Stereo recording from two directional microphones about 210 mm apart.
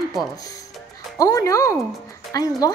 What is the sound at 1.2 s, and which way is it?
Speech, 15° left (ahead or behind).